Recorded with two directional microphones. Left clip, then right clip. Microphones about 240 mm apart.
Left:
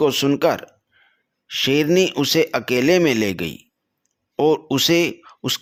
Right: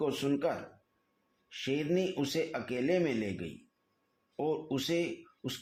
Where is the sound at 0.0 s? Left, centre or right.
Left.